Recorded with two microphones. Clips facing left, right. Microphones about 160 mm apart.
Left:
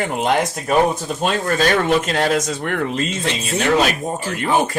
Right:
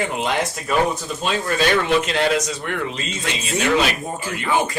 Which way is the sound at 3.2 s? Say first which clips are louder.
Right 1 dB; 40° left (ahead or behind).